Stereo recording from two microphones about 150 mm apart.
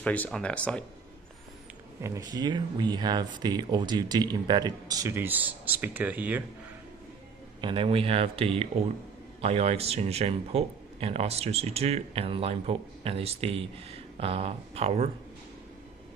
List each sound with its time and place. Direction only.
0.0 s speech: 10° left (ahead or behind)
2.0 s speech: 20° right (ahead or behind)
7.6 s speech: 35° right (ahead or behind)